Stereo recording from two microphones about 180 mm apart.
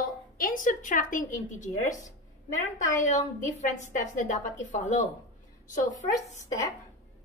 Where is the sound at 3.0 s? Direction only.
45° left (ahead or behind).